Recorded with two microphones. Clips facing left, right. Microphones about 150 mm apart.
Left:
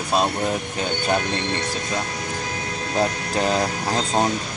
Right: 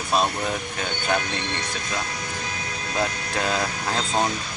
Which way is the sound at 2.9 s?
30° left (ahead or behind).